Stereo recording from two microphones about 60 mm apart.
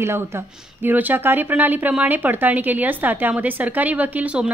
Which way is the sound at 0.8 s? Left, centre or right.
Right.